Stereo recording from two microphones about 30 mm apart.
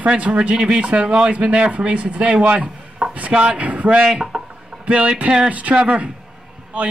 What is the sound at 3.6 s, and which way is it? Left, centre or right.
Speech, right.